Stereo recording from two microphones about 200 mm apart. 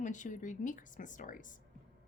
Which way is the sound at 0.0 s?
40° left (ahead or behind).